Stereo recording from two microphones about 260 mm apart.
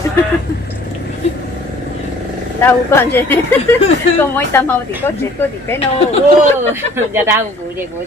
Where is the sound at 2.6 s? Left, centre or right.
Centre.